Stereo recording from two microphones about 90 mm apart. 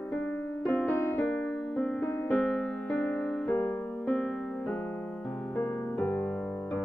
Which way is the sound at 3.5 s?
20° left (ahead or behind).